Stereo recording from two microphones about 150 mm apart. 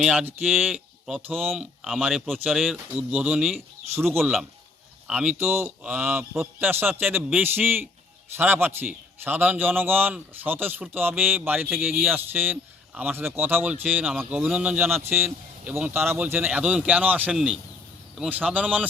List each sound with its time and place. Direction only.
0.0 s a man's voice: 5° right (ahead or behind)
3.9 s a man's voice: 15° right (ahead or behind)
4.2 s a man's voice: centre (ahead or behind)